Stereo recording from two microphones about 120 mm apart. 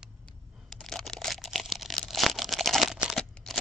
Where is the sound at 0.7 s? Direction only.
5° left (ahead or behind).